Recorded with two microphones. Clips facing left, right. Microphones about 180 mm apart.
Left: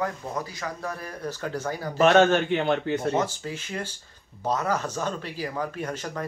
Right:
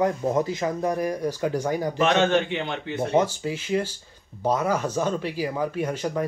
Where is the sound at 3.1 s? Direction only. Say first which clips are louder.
Right 5 dB; 10° right (ahead or behind).